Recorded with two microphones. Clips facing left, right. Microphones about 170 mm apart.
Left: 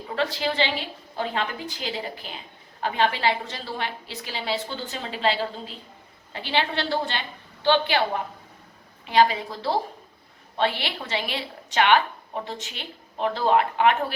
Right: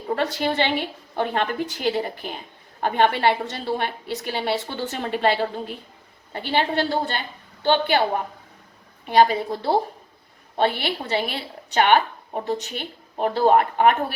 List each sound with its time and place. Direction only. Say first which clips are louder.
0.1 s a woman's voice: right 3 dB; 50° right (ahead or behind)